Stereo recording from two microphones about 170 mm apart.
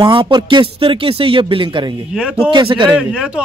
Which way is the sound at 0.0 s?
30° right (ahead or behind).